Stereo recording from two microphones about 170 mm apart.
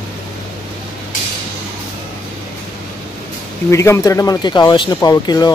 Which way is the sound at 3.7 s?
15° left (ahead or behind).